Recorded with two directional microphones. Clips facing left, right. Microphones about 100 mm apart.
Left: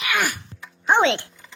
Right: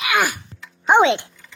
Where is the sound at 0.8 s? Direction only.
15° right (ahead or behind).